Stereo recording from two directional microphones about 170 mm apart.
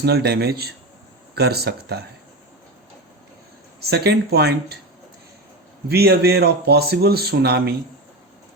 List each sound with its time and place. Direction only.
0.0 s speech: 70° right (ahead or behind)
3.8 s speech: 70° right (ahead or behind)
5.9 s speech: 70° right (ahead or behind)